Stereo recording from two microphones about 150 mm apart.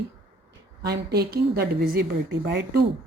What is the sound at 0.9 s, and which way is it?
A woman's voice, 90° right.